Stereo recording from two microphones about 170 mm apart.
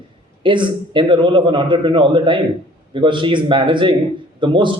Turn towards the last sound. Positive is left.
turn(degrees=-30)  # may be behind; listen again after turning